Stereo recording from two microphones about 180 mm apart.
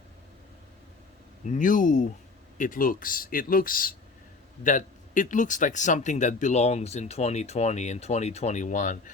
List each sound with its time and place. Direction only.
1.5 s speech: 45° left (ahead or behind)